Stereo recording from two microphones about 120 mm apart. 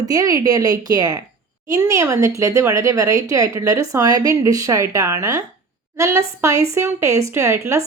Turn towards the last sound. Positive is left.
turn(degrees=-25)  # may be behind; listen again after turning